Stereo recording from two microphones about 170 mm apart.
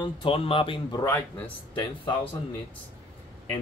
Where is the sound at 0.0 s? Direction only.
30° left (ahead or behind).